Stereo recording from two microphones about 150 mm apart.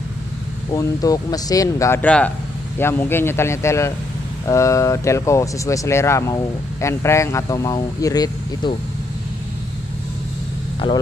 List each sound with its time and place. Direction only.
0.7 s speech: 25° left (ahead or behind)